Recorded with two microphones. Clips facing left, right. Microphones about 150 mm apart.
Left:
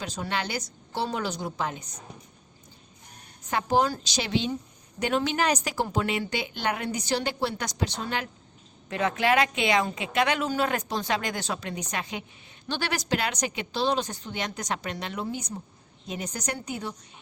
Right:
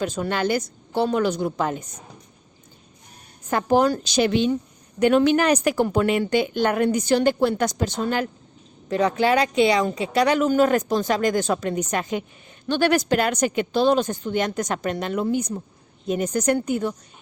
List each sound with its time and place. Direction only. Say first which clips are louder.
0.0 s a woman's voice: right 8 dB; 50° right (ahead or behind)
3.5 s a woman's voice: right 6 dB; 55° right (ahead or behind)